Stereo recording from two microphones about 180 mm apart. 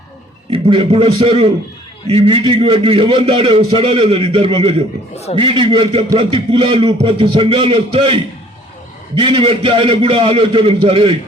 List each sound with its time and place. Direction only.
0.5 s a man's voice: 30° right (ahead or behind)
9.2 s a man's voice: 30° right (ahead or behind)